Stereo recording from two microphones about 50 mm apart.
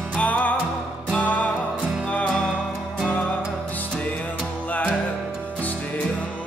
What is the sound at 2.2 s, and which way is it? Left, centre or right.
Music, centre.